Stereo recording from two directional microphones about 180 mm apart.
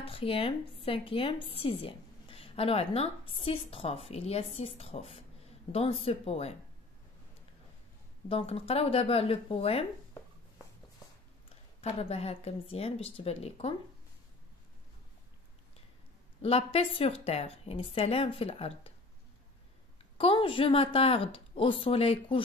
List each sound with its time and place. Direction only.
0.0 s a woman's voice: 30° left (ahead or behind)
8.3 s a woman's voice: 30° left (ahead or behind)
11.8 s a woman's voice: 35° left (ahead or behind)
16.4 s a woman's voice: 35° left (ahead or behind)
20.2 s a woman's voice: 30° left (ahead or behind)